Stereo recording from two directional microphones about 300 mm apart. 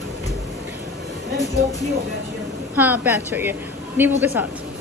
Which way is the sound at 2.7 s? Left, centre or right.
Centre.